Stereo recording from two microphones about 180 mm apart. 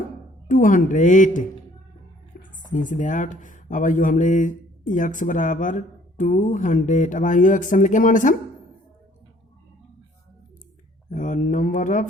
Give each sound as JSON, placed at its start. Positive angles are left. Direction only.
{"t": 0.4, "sound": "speech", "side_deg": 50}
{"t": 11.1, "sound": "speech", "side_deg": 45}